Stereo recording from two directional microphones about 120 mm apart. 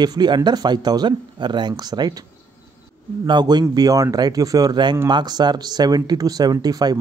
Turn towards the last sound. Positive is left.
turn(degrees=-35)  # may be behind; listen again after turning